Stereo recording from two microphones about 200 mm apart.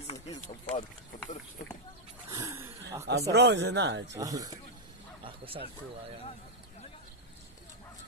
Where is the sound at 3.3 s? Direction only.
60° right (ahead or behind).